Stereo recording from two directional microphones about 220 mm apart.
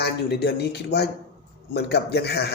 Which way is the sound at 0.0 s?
50° left (ahead or behind).